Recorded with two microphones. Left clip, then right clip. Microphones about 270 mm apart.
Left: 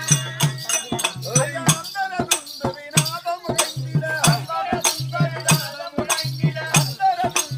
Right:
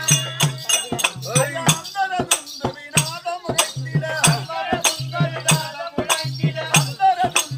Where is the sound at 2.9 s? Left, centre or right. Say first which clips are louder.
Even; centre.